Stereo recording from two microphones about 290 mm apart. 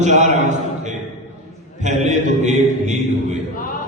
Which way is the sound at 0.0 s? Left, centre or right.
Right.